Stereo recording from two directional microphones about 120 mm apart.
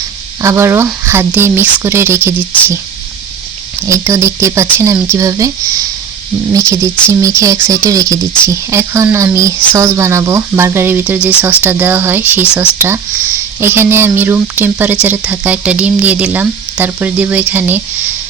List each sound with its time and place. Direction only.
0.4 s speech: 25° right (ahead or behind)
3.8 s speech: 25° right (ahead or behind)